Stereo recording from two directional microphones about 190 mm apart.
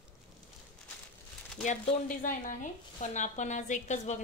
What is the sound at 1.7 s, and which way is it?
A woman's voice, 40° left (ahead or behind).